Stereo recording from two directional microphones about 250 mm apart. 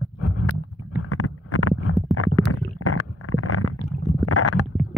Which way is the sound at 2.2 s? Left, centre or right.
Left.